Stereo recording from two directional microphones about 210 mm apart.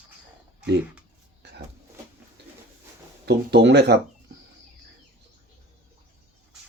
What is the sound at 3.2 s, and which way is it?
Speech, 55° right (ahead or behind).